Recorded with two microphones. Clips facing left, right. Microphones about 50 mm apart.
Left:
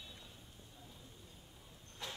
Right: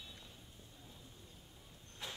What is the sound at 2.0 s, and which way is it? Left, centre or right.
Train, centre.